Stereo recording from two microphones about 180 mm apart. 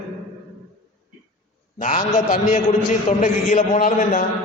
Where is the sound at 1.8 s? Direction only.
45° left (ahead or behind).